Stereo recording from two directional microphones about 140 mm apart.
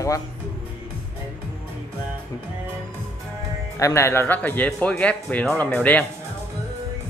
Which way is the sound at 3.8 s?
20° left (ahead or behind).